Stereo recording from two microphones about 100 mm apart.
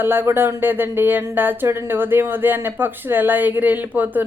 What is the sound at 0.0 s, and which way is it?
A woman's voice, 20° right (ahead or behind).